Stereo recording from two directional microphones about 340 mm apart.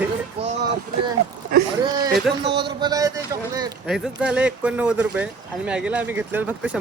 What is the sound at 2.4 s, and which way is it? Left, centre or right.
Speech, right.